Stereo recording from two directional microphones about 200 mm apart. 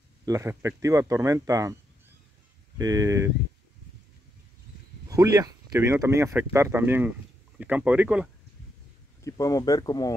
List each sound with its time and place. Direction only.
0.2 s speech: 15° right (ahead or behind)
2.8 s speech: 15° right (ahead or behind)
5.0 s speech: 15° right (ahead or behind)
9.2 s speech: 15° left (ahead or behind)